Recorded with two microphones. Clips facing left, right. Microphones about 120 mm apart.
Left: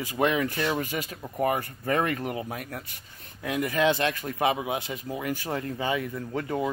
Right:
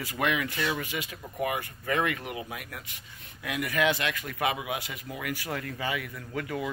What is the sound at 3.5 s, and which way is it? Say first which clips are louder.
Speech: left 3 dB; 30° left (ahead or behind).